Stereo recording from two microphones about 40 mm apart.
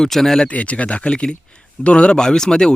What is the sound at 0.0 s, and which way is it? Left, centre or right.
Speech, centre.